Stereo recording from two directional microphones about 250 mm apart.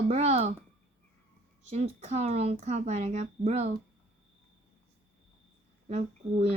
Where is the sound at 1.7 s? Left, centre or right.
Right.